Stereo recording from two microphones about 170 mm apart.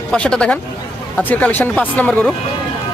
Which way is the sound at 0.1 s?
5° left (ahead or behind).